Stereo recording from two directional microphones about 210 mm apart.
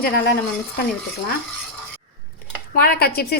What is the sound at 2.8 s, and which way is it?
Speech, 45° left (ahead or behind).